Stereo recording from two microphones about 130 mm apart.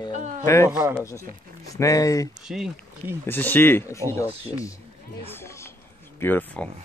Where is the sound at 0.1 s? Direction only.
65° right (ahead or behind).